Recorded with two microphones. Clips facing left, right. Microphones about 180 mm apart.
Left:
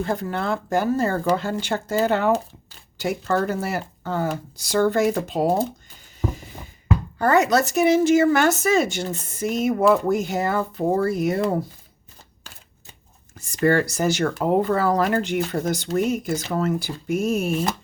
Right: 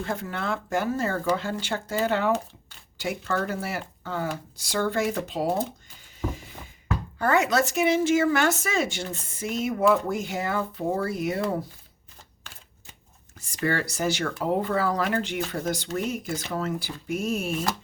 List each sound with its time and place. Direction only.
0.0 s speech: 40° left (ahead or behind)
7.2 s speech: 40° left (ahead or behind)
13.3 s speech: 45° left (ahead or behind)